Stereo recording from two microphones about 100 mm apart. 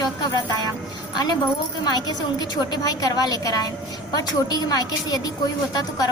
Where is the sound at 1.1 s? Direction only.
45° left (ahead or behind).